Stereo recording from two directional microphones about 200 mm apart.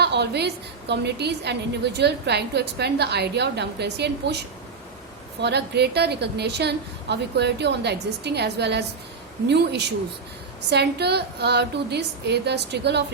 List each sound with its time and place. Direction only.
0.0 s a woman's voice: 55° right (ahead or behind)
5.4 s a woman's voice: 55° right (ahead or behind)